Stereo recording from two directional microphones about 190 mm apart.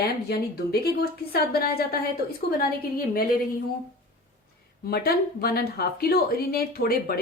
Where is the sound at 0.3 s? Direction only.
55° left (ahead or behind).